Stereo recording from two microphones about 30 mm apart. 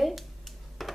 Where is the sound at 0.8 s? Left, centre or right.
Centre.